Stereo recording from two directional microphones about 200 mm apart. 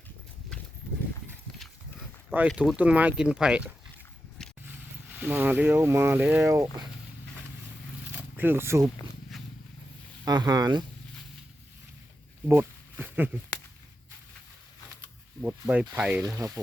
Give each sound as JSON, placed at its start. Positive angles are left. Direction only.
{"t": 1.5, "sound": "livestock", "side_deg": -5}
{"t": 2.5, "sound": "speech", "side_deg": -5}
{"t": 4.4, "sound": "vehicle", "side_deg": 5}
{"t": 5.2, "sound": "speech", "side_deg": -10}
{"t": 8.4, "sound": "speech", "side_deg": -10}
{"t": 9.3, "sound": "vehicle", "side_deg": 0}
{"t": 10.2, "sound": "speech", "side_deg": -20}
{"t": 12.5, "sound": "a sound", "side_deg": -10}
{"t": 15.4, "sound": "speech", "side_deg": -5}